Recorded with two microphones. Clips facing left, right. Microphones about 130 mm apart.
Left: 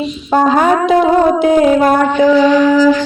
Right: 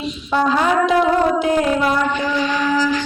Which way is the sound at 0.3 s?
50° left (ahead or behind).